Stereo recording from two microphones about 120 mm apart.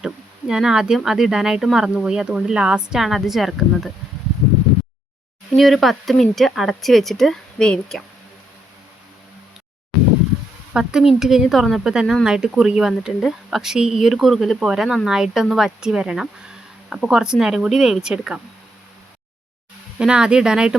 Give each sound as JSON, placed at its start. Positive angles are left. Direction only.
{"t": 0.0, "sound": "speech", "side_deg": -5}
{"t": 5.5, "sound": "speech", "side_deg": 0}
{"t": 10.8, "sound": "speech", "side_deg": -5}
{"t": 20.0, "sound": "speech", "side_deg": -5}